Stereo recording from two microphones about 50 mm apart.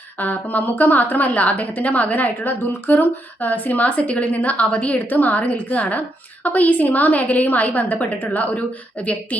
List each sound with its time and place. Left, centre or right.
0.2 s a woman's voice: left